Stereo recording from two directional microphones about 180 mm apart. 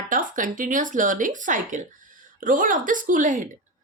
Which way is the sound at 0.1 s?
45° right (ahead or behind).